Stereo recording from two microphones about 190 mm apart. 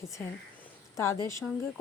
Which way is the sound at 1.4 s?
Centre (ahead or behind).